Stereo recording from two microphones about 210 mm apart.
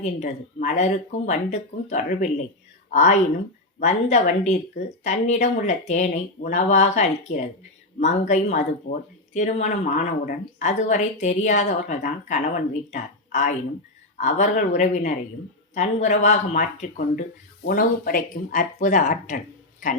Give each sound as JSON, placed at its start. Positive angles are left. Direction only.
{"t": 0.0, "sound": "speech", "side_deg": 35}